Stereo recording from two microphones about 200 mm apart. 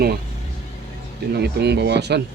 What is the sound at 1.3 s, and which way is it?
Speech, 55° right (ahead or behind).